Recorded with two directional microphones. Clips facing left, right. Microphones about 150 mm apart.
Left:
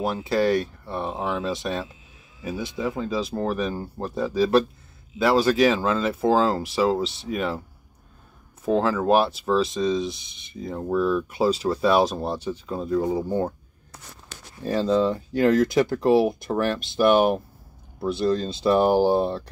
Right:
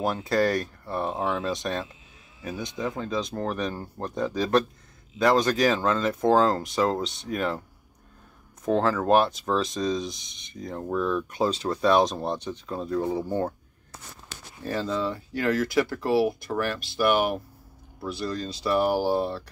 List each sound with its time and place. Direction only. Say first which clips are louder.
0.0 s speech: left 1 dB; centre (ahead or behind)
8.6 s speech: left 2 dB; 5° left (ahead or behind)
14.6 s speech: left 7 dB; 20° left (ahead or behind)